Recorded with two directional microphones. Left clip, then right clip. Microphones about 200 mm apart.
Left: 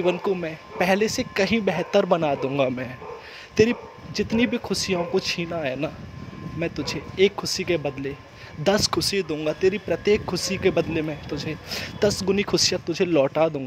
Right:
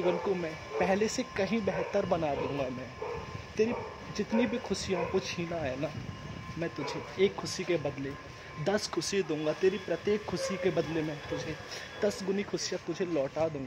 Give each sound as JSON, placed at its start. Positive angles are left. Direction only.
{"t": 0.0, "sound": "speech", "side_deg": 25}